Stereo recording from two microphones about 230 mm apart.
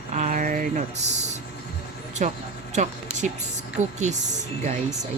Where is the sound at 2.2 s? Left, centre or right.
Right.